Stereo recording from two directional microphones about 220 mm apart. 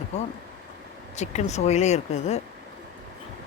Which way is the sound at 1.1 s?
30° left (ahead or behind).